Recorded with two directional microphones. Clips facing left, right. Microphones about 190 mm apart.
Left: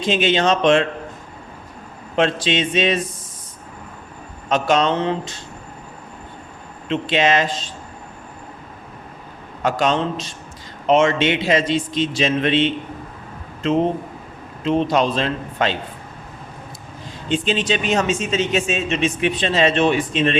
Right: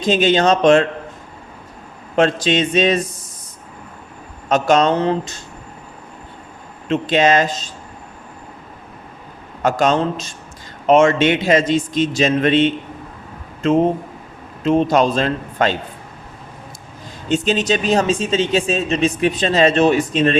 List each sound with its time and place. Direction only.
0.0 s speech: 40° right (ahead or behind)
2.1 s a man's voice: 45° right (ahead or behind)
4.4 s a man's voice: 45° right (ahead or behind)
6.8 s a man's voice: 45° right (ahead or behind)
9.6 s a man's voice: 45° right (ahead or behind)
14.6 s a man's voice: 45° right (ahead or behind)
17.2 s speech: 40° right (ahead or behind)